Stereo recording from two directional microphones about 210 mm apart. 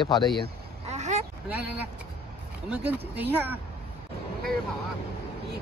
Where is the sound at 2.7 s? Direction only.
10° right (ahead or behind).